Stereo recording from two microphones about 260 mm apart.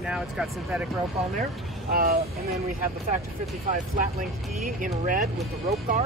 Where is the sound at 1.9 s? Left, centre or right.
Right.